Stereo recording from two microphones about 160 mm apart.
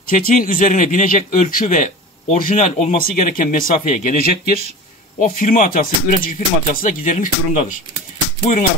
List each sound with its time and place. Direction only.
0.1 s a man's voice: 60° left (ahead or behind)
3.0 s speech: 60° left (ahead or behind)